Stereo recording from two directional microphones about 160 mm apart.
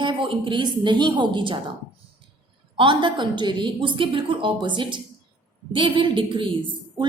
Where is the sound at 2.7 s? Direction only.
30° right (ahead or behind).